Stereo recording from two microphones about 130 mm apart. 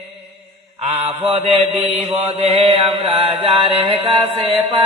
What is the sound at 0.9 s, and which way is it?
Mantra, 50° right (ahead or behind).